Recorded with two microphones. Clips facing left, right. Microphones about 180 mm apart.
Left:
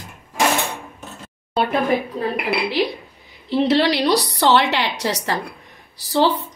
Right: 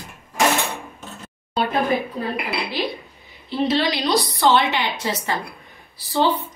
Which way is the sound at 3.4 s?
75° left (ahead or behind).